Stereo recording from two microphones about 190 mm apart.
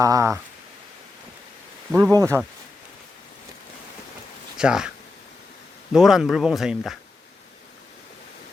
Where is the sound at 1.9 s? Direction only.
15° right (ahead or behind).